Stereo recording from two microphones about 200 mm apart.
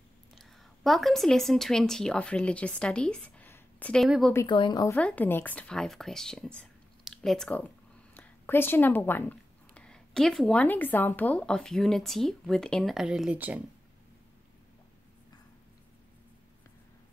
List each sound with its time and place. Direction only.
0.4 s a woman's voice: centre (ahead or behind)
4.3 s speech: 15° left (ahead or behind)
4.9 s speech: 5° left (ahead or behind)